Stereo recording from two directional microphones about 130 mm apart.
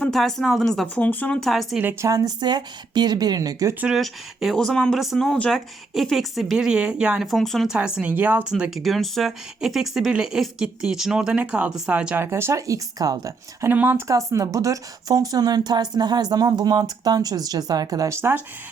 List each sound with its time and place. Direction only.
0.1 s speech: centre (ahead or behind)
1.8 s speech: 20° right (ahead or behind)
3.8 s speech: 5° right (ahead or behind)